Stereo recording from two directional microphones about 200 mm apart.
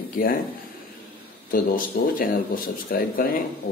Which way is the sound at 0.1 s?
45° left (ahead or behind).